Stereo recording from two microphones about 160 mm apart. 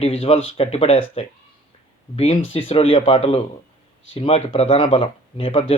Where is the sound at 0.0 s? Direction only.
40° left (ahead or behind).